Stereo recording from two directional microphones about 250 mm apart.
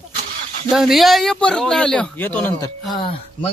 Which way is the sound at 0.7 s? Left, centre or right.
Centre.